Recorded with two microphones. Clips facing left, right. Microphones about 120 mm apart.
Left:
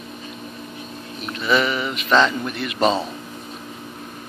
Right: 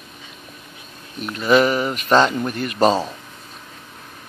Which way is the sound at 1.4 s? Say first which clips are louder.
Right 5 dB; 45° right (ahead or behind).